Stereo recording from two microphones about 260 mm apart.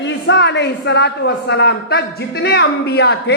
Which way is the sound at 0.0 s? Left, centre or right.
Left.